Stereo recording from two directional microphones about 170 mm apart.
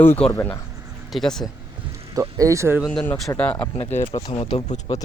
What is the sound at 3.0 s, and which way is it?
Speech, 15° left (ahead or behind).